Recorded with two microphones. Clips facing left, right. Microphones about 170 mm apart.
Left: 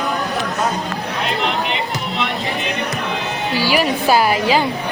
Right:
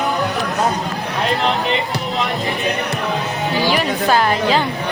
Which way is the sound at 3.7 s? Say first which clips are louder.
Left 3 dB; 10° left (ahead or behind).